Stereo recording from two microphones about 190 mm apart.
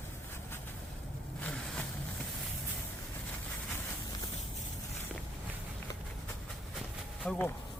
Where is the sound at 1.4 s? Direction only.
5° left (ahead or behind).